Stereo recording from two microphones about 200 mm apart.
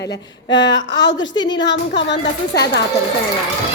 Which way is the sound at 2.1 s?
60° left (ahead or behind).